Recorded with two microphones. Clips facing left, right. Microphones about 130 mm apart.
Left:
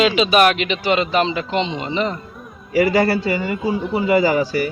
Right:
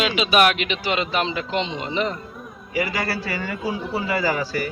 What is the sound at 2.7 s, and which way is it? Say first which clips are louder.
A man's voice: left 9 dB; 35° left (ahead or behind).